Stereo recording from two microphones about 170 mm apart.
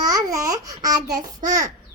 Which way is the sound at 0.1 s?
20° right (ahead or behind).